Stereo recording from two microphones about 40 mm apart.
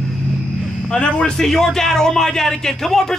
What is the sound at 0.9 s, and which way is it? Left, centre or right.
Speech, left.